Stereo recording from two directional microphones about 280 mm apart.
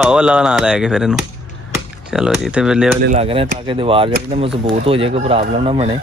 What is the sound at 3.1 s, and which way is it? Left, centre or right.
Speech, centre.